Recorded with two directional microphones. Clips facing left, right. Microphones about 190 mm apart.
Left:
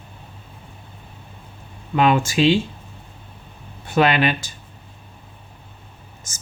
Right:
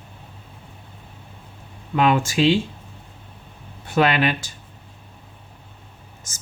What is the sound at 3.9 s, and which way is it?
Speech, 20° left (ahead or behind).